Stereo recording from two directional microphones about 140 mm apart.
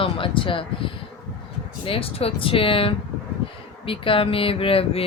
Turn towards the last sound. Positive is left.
turn(degrees=40)  # may be behind; listen again after turning